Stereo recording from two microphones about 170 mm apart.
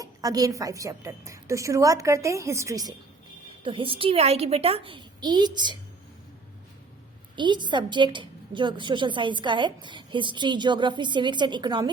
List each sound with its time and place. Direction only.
0.0 s a woman's voice: 20° right (ahead or behind)
3.6 s a woman's voice: 30° right (ahead or behind)
7.3 s a woman's voice: 25° right (ahead or behind)